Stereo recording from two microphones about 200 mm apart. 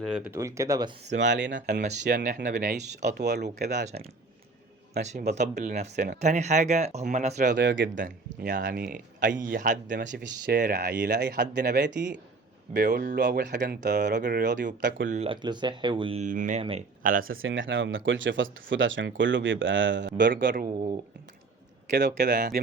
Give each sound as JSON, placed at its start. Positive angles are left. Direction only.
{"t": 0.0, "sound": "speech", "side_deg": -5}
{"t": 0.3, "sound": "speech", "side_deg": -15}
{"t": 1.2, "sound": "speech", "side_deg": -65}
{"t": 2.0, "sound": "speech", "side_deg": -50}
{"t": 4.9, "sound": "speech", "side_deg": -35}
{"t": 7.5, "sound": "speech", "side_deg": -60}
{"t": 7.9, "sound": "speech", "side_deg": -40}
{"t": 10.2, "sound": "speech", "side_deg": -50}
{"t": 15.1, "sound": "speech", "side_deg": -30}
{"t": 16.2, "sound": "speech", "side_deg": -40}
{"t": 17.2, "sound": "speech", "side_deg": -85}
{"t": 20.3, "sound": "speech", "side_deg": -45}
{"t": 21.9, "sound": "speech", "side_deg": -50}